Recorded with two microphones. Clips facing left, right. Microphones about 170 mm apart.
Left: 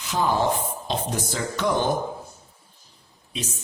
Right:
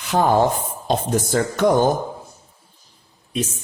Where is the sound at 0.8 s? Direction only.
50° right (ahead or behind).